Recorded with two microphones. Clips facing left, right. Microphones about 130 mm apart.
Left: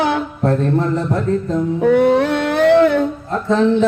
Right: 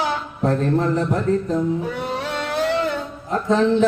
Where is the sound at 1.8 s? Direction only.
60° left (ahead or behind).